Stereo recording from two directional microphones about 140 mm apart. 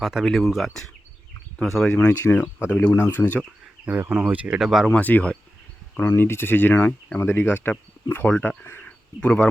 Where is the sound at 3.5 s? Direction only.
10° right (ahead or behind).